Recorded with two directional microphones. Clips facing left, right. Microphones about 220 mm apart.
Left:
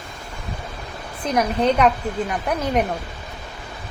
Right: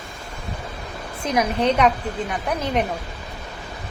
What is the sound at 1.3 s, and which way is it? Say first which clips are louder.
A woman's voice: left 1 dB; centre (ahead or behind).